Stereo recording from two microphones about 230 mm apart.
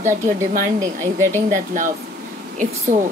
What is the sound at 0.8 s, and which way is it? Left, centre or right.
Speech, centre.